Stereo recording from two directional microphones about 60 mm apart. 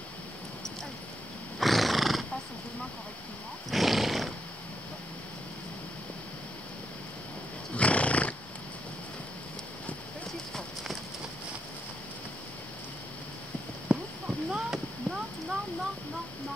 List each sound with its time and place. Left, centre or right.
1.6 s wild animals: centre
3.7 s roar: centre
7.7 s roaring cats: left
13.9 s clip-clop: right
14.2 s clip-clop: centre